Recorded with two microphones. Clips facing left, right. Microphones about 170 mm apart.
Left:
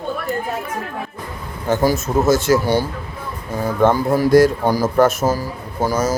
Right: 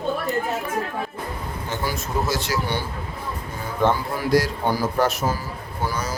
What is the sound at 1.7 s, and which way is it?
Speech, 45° left (ahead or behind).